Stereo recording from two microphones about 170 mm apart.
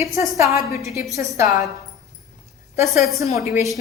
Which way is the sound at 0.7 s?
15° right (ahead or behind).